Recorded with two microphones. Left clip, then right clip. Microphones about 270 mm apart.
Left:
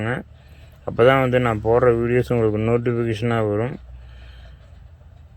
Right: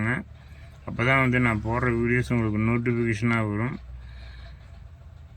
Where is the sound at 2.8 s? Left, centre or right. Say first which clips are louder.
Left 4 dB; left.